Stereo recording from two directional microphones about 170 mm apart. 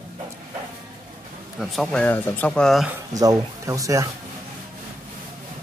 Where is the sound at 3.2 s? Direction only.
20° right (ahead or behind).